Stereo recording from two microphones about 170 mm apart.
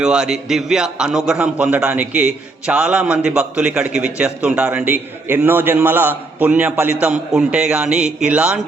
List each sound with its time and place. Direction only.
0.0 s a man's voice: 5° right (ahead or behind)